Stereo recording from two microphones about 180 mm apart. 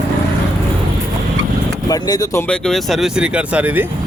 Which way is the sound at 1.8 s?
20° left (ahead or behind).